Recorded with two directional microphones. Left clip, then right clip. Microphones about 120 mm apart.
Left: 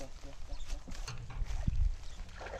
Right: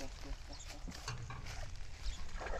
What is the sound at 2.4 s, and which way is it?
Dog, 10° right (ahead or behind).